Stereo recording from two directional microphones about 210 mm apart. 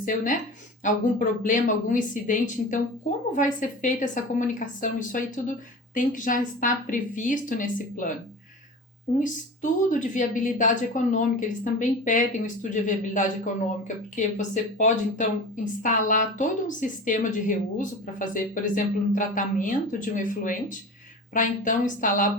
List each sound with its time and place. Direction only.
0.0 s speech: 35° left (ahead or behind)
9.2 s speech: 35° left (ahead or behind)